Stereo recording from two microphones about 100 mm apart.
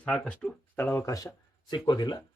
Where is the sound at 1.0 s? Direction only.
35° left (ahead or behind).